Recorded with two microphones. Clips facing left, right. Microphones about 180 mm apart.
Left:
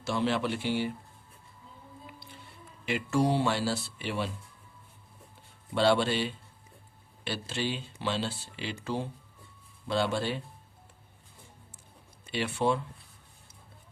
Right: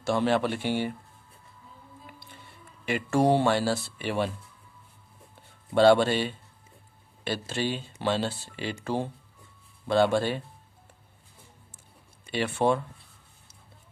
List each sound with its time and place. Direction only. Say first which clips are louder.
0.0 s speech: right 4 dB; 55° right (ahead or behind)
2.8 s speech: right 4 dB; 55° right (ahead or behind)
5.7 s speech: right 6 dB; 50° right (ahead or behind)
12.3 s speech: right 3 dB; 50° right (ahead or behind)